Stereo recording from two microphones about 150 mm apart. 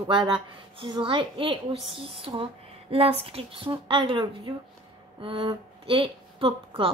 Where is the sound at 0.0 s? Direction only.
30° right (ahead or behind).